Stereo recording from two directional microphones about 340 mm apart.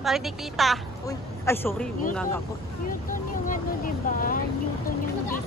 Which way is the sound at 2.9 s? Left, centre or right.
Left.